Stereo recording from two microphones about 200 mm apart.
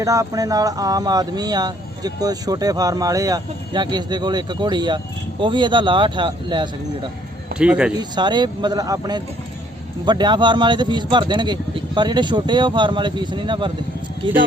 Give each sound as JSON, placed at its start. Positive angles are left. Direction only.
{"t": 0.0, "sound": "speech", "side_deg": -15}
{"t": 7.6, "sound": "speech", "side_deg": -5}
{"t": 7.9, "sound": "speech", "side_deg": -20}